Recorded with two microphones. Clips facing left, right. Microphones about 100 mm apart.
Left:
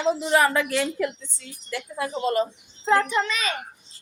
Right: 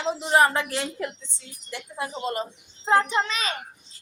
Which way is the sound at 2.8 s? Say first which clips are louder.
Even; 25° right (ahead or behind).